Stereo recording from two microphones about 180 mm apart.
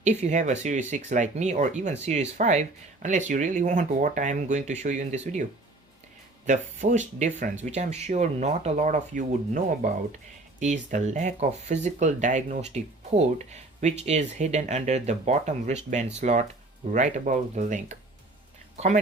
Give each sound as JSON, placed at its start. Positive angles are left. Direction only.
{"t": 0.0, "sound": "speech", "side_deg": -40}